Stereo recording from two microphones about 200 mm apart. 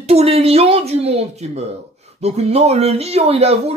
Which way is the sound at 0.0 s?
30° right (ahead or behind).